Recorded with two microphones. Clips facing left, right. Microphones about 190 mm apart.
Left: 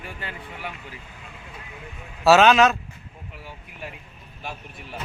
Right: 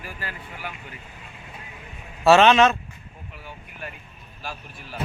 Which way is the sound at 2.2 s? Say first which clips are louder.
Even; centre (ahead or behind).